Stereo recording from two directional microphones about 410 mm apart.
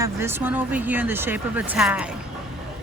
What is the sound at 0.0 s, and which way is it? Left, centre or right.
Speech, centre.